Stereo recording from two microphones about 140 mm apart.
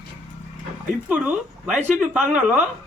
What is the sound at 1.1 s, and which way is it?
A man's voice, 10° right (ahead or behind).